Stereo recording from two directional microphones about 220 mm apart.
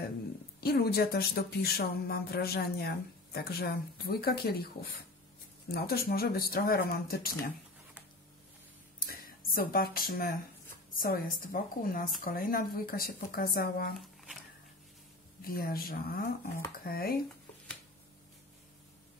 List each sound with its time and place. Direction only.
0.6 s speech: 45° left (ahead or behind)
5.7 s speech: 45° left (ahead or behind)
9.0 s a sound: 40° left (ahead or behind)
10.9 s speech: 40° left (ahead or behind)
13.9 s shuffling cards: centre (ahead or behind)
15.4 s speech: 40° left (ahead or behind)